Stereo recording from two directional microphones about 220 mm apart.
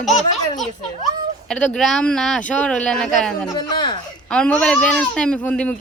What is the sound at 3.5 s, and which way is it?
Speech, 20° left (ahead or behind).